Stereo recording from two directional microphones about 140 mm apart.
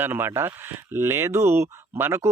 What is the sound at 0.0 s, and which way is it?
Speech, 15° right (ahead or behind).